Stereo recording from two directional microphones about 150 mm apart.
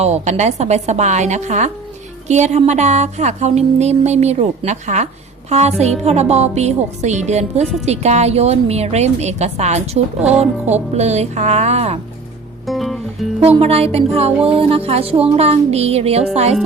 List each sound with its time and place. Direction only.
0.0 s music: 50° right (ahead or behind)
10.2 s speech: 5° right (ahead or behind)
10.9 s music: 45° right (ahead or behind)
12.6 s music: centre (ahead or behind)
13.4 s music: 40° right (ahead or behind)